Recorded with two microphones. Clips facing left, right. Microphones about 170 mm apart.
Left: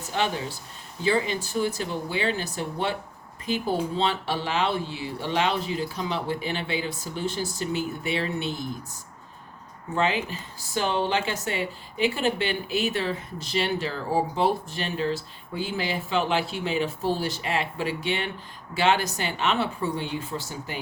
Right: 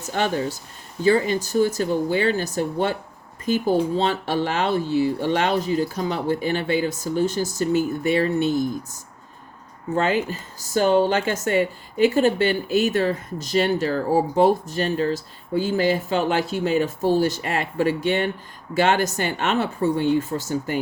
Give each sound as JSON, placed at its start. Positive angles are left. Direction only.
{"t": 0.0, "sound": "speech", "side_deg": -45}